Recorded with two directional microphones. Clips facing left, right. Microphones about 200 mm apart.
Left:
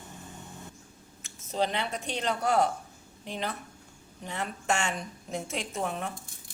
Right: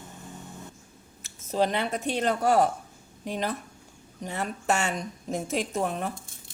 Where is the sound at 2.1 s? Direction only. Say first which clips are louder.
Right 3 dB; 45° right (ahead or behind).